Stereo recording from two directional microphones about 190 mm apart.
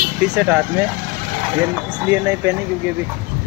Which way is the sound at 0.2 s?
10° right (ahead or behind).